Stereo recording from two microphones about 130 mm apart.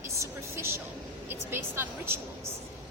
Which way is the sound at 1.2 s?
20° right (ahead or behind).